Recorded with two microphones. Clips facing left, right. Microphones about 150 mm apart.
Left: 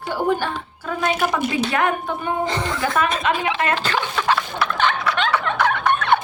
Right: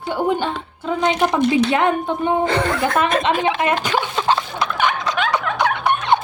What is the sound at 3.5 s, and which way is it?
Speech, 15° right (ahead or behind).